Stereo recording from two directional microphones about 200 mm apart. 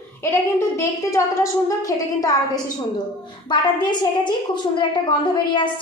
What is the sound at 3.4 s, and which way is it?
A woman's voice, 25° left (ahead or behind).